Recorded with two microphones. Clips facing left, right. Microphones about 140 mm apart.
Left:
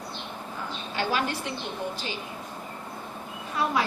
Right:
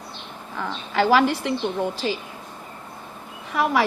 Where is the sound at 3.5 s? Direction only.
75° right (ahead or behind).